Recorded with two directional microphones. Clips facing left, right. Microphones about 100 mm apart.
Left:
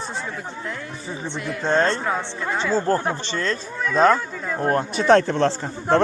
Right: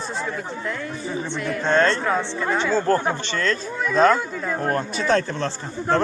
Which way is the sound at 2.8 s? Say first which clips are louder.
Right 1 dB; 20° left (ahead or behind).